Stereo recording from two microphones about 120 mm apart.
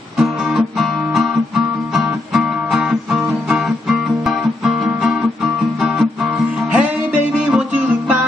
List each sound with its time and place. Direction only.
0.2 s guitar: centre (ahead or behind)
7.5 s music: 15° right (ahead or behind)